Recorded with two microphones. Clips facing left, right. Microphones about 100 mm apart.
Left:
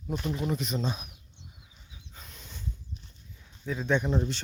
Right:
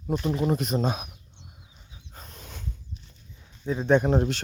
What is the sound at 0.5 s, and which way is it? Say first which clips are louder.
Speech: right 5 dB; 45° right (ahead or behind).